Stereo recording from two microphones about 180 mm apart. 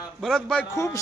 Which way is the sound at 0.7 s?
15° left (ahead or behind).